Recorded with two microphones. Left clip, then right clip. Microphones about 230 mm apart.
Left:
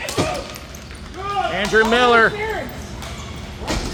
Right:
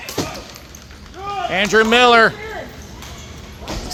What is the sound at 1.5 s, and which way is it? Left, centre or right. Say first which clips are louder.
Speech: right 3 dB; right.